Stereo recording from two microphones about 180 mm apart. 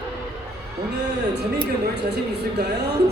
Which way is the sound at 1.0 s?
70° right (ahead or behind).